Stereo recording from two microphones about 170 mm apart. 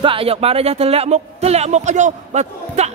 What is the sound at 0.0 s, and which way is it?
Speech, 30° right (ahead or behind).